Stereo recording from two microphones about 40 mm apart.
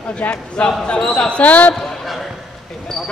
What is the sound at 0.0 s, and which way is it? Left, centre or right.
Speech, left.